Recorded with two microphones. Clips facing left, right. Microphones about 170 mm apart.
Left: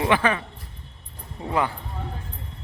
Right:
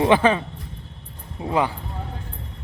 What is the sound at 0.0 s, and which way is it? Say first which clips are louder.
A man's voice: right 5 dB; 25° right (ahead or behind).